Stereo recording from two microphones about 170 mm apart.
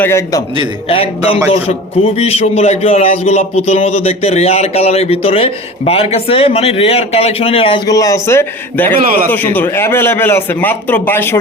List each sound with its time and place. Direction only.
0.0 s a man's voice: 15° left (ahead or behind)
0.9 s a man's voice: 35° left (ahead or behind)
7.9 s a man's voice: 20° left (ahead or behind)